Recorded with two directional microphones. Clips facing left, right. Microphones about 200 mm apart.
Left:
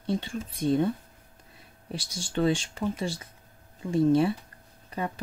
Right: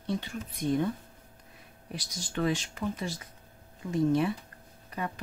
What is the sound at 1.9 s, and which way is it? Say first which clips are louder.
Speech: left 4 dB; 30° left (ahead or behind).